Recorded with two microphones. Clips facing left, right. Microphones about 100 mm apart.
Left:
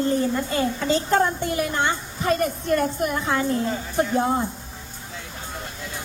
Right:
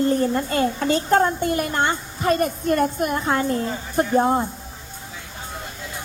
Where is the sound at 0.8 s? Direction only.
55° right (ahead or behind).